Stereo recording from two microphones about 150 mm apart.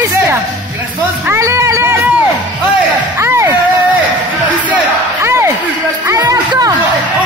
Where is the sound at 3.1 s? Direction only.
20° right (ahead or behind).